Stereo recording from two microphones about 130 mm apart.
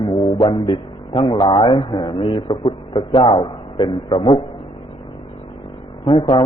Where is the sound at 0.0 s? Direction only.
40° left (ahead or behind).